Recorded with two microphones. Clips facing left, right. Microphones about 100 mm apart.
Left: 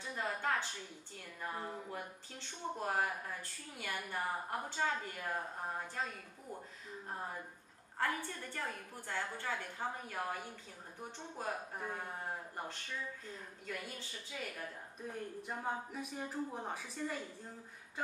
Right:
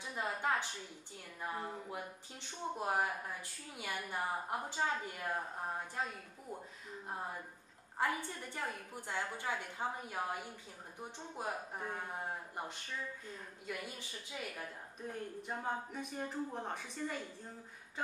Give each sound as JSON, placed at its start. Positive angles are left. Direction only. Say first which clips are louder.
{"t": 0.0, "sound": "a sound", "louder": "right 1 dB", "side_deg": -15}
{"t": 1.4, "sound": "speech", "louder": "right 1 dB", "side_deg": -5}
{"t": 8.0, "sound": "speech", "louder": "right 1 dB", "side_deg": -15}
{"t": 15.0, "sound": "speech", "louder": "right 1 dB", "side_deg": 0}